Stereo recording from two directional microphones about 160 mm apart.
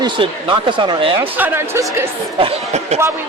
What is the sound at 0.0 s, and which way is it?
Speech, 30° right (ahead or behind).